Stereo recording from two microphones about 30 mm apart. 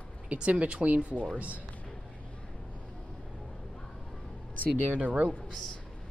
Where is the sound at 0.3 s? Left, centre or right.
Right.